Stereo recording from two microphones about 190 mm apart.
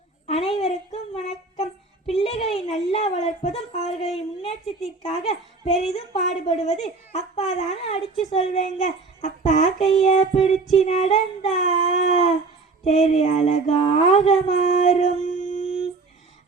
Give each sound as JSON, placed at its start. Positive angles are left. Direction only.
{"t": 0.3, "sound": "a sound", "side_deg": 35}
{"t": 2.9, "sound": "a child's voice", "side_deg": 35}
{"t": 10.1, "sound": "child singing", "side_deg": 30}
{"t": 10.8, "sound": "a child's voice", "side_deg": 35}